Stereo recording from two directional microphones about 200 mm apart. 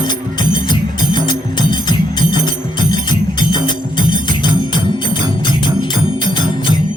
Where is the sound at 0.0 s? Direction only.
20° left (ahead or behind).